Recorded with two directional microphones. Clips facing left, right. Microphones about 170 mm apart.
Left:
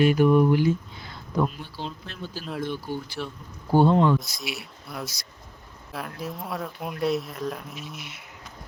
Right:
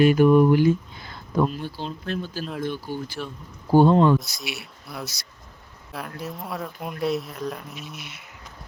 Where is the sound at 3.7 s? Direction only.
45° right (ahead or behind).